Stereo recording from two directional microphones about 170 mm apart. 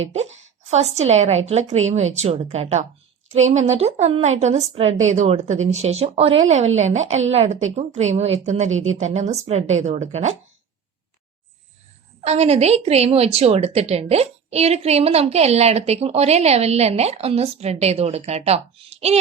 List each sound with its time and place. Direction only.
0.0 s a woman's voice: 40° right (ahead or behind)
12.2 s a woman's voice: 40° right (ahead or behind)